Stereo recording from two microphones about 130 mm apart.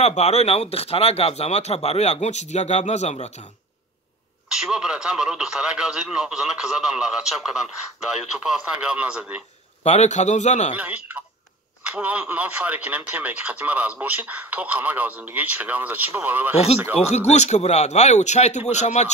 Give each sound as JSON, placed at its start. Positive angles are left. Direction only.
{"t": 0.0, "sound": "speech", "side_deg": 55}
{"t": 4.5, "sound": "speech", "side_deg": -5}
{"t": 9.8, "sound": "speech", "side_deg": 60}
{"t": 10.7, "sound": "speech", "side_deg": -15}
{"t": 17.1, "sound": "speech", "side_deg": 60}